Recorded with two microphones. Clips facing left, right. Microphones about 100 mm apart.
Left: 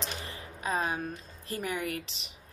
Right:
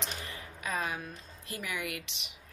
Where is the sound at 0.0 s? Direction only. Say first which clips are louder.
Left 2 dB; 30° left (ahead or behind).